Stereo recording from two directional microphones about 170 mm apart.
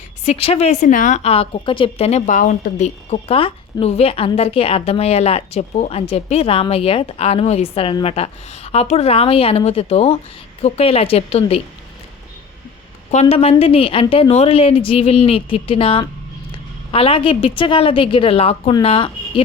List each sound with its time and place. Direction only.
0.3 s a woman's voice: 35° left (ahead or behind)
13.1 s a woman's voice: 40° left (ahead or behind)